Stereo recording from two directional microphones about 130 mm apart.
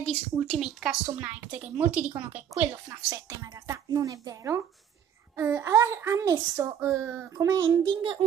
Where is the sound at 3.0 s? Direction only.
25° right (ahead or behind).